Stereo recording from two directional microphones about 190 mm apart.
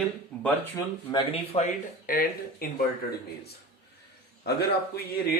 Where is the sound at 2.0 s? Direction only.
50° left (ahead or behind).